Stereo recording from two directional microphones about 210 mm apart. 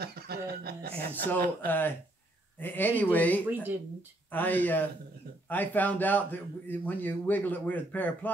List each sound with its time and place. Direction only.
0.0 s speech: 50° right (ahead or behind)
0.9 s speech: 10° left (ahead or behind)
3.4 s speech: 10° right (ahead or behind)
4.3 s speech: 10° left (ahead or behind)